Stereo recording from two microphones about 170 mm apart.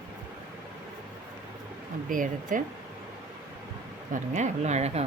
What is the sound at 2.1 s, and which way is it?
Speech, 50° right (ahead or behind).